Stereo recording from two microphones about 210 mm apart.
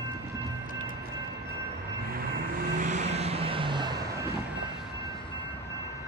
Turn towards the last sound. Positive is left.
turn(degrees=-20)  # may be behind; listen again after turning